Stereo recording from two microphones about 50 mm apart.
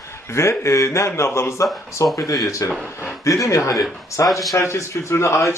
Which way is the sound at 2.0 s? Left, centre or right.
Left.